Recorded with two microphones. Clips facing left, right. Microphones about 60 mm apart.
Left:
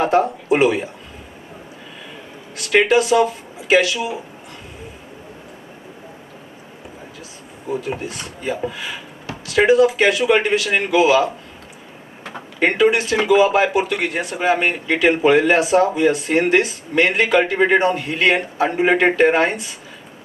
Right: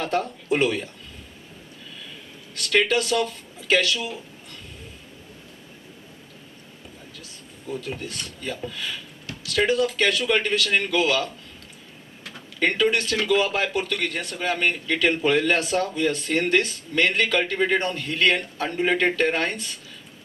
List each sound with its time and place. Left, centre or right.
0.0 s speech: centre
2.6 s a man's voice: centre
7.7 s a man's voice: left